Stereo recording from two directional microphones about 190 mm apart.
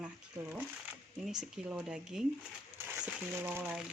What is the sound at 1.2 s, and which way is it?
Speech, 5° right (ahead or behind).